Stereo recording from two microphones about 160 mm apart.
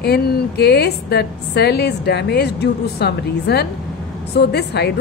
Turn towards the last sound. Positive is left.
turn(degrees=90)